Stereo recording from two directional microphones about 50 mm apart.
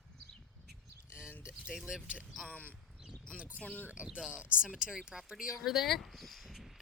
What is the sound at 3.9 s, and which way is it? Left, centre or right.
Speech, right.